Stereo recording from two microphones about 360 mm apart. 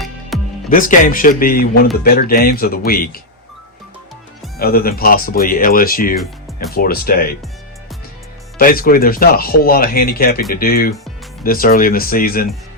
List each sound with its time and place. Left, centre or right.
0.3 s music: centre
0.7 s speech: left
4.5 s speech: left
8.5 s speech: left